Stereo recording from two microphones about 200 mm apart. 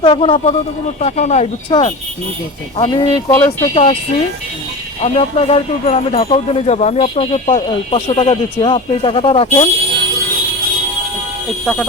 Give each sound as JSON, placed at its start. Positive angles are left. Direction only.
{"t": 0.0, "sound": "speech", "side_deg": 25}
{"t": 3.4, "sound": "speech", "side_deg": 30}
{"t": 5.0, "sound": "speech", "side_deg": 30}
{"t": 11.6, "sound": "speech", "side_deg": 5}